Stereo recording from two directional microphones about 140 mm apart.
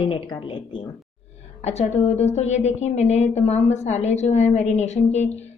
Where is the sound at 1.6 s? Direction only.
50° left (ahead or behind).